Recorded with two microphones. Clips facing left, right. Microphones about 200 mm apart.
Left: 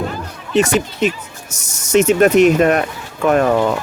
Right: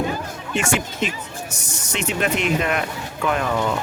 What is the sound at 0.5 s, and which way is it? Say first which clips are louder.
Speech: left 8 dB; 35° left (ahead or behind).